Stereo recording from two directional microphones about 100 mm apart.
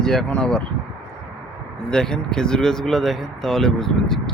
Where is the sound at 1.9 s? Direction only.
5° left (ahead or behind).